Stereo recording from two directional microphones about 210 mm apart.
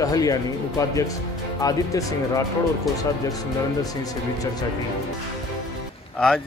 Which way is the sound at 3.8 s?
15° left (ahead or behind).